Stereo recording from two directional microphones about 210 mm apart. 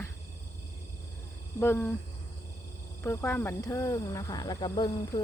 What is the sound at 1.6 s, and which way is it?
Speech, 10° left (ahead or behind).